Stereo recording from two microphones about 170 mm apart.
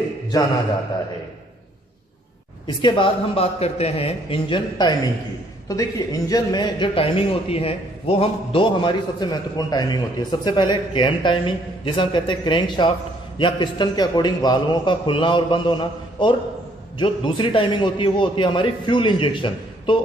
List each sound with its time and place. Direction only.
2.6 s a man's voice: 25° left (ahead or behind)